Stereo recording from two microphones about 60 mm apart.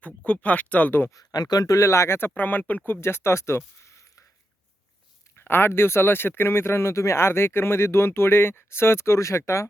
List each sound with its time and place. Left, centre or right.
0.3 s speech: left
1.1 s speech: left
2.1 s speech: left
3.8 s a sound: left
5.4 s speech: left